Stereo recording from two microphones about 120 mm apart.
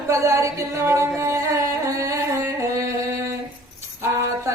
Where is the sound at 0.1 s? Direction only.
25° right (ahead or behind).